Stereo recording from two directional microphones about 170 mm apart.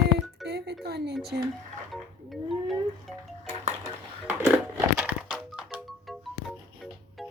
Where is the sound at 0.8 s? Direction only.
70° right (ahead or behind).